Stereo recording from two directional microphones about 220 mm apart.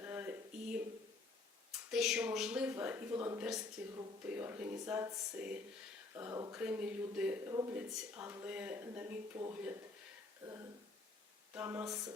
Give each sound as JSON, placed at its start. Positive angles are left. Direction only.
{"t": 0.0, "sound": "a sound", "side_deg": -10}
{"t": 1.9, "sound": "speech", "side_deg": 0}
{"t": 11.5, "sound": "speech", "side_deg": -10}